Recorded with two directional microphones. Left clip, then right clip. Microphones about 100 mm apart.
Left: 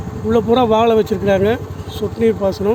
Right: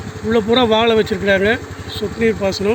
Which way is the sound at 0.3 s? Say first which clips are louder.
Left 1 dB; 15° left (ahead or behind).